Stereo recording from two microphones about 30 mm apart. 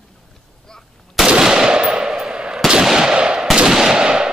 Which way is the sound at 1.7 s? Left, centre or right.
Right.